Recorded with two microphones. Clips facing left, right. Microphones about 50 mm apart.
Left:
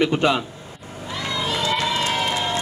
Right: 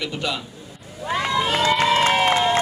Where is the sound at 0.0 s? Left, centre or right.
Left.